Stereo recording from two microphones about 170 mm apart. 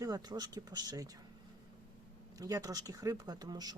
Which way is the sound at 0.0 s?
25° right (ahead or behind).